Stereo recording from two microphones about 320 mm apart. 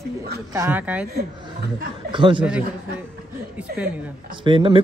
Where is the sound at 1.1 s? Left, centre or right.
Right.